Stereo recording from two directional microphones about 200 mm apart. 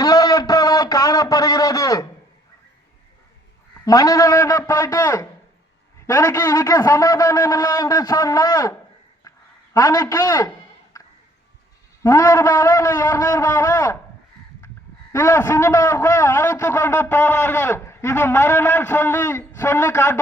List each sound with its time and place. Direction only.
0.0 s a sound: 20° left (ahead or behind)
3.8 s a man's voice: 15° left (ahead or behind)
9.7 s a man's voice: 15° left (ahead or behind)
12.0 s a man's voice: 15° left (ahead or behind)
15.1 s a man's voice: 10° left (ahead or behind)